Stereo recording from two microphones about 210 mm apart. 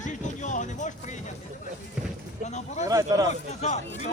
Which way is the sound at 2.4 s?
35° left (ahead or behind).